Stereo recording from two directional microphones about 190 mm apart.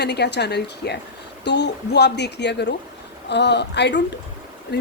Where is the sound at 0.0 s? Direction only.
60° left (ahead or behind).